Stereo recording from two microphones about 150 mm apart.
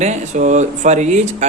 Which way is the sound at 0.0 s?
50° right (ahead or behind).